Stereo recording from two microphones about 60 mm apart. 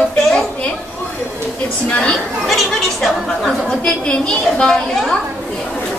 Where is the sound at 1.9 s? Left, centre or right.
Centre.